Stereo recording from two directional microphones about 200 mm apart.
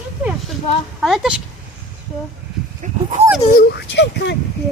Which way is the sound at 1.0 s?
Centre (ahead or behind).